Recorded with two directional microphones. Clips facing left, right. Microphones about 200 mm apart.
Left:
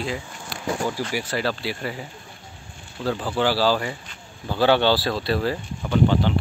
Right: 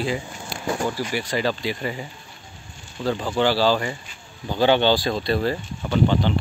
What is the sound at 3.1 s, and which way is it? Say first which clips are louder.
Speech: right 1 dB; 5° left (ahead or behind).